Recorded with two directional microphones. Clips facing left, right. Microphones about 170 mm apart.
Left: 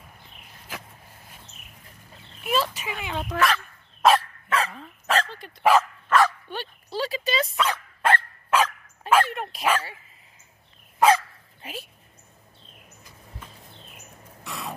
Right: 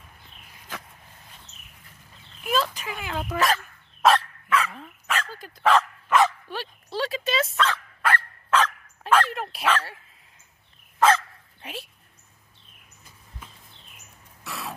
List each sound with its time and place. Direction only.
2.4 s speech: 5° left (ahead or behind)
3.3 s speech: 40° right (ahead or behind)
4.0 s dog: centre (ahead or behind)
4.5 s dog: 30° left (ahead or behind)
5.6 s speech: 10° left (ahead or behind)
6.0 s bow-wow: 20° right (ahead or behind)
6.5 s a sound: centre (ahead or behind)
8.5 s dog: 10° left (ahead or behind)
14.4 s a sound: centre (ahead or behind)